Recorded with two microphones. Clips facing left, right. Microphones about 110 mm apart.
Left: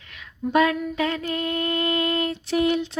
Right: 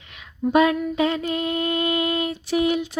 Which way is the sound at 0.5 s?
20° right (ahead or behind).